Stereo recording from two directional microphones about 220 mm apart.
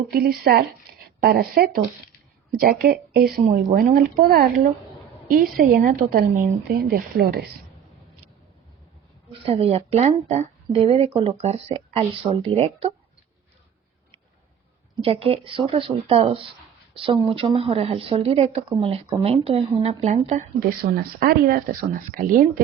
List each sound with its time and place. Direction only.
0.1 s speech: 45° right (ahead or behind)
3.4 s speech: 35° right (ahead or behind)
5.7 s speech: 40° right (ahead or behind)
9.5 s speech: 25° right (ahead or behind)
15.0 s speech: 25° right (ahead or behind)